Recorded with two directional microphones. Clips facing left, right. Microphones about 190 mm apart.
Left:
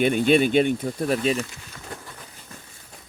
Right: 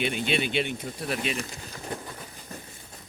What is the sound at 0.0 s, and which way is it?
Speech, 50° left (ahead or behind).